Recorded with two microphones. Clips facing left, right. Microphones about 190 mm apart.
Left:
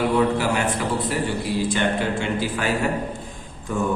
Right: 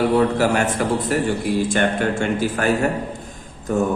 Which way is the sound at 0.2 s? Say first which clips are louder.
Right 3 dB; 45° right (ahead or behind).